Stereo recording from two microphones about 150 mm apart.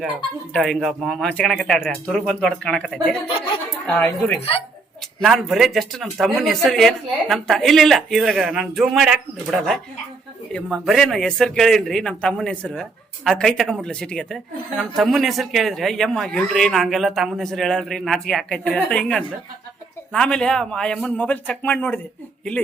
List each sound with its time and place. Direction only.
0.5 s a man's voice: 5° left (ahead or behind)
4.4 s speech: 40° left (ahead or behind)
5.2 s a man's voice: centre (ahead or behind)